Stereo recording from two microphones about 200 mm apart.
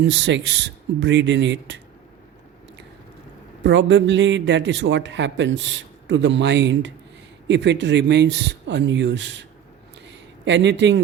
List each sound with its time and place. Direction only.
0.0 s a man's voice: 65° right (ahead or behind)
3.6 s a man's voice: 65° right (ahead or behind)